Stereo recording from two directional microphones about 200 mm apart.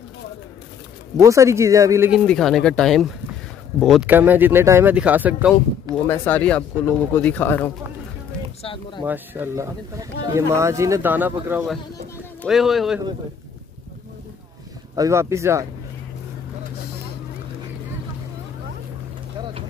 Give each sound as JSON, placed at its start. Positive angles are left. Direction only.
{"t": 1.1, "sound": "speech", "side_deg": -15}
{"t": 2.1, "sound": "speech", "side_deg": 0}
{"t": 6.0, "sound": "speech", "side_deg": 10}
{"t": 8.6, "sound": "a sound", "side_deg": 25}
{"t": 9.0, "sound": "speech", "side_deg": -10}
{"t": 15.0, "sound": "speech", "side_deg": -15}